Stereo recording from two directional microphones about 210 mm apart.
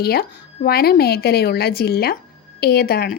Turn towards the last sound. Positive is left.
turn(degrees=45)  # may be behind; listen again after turning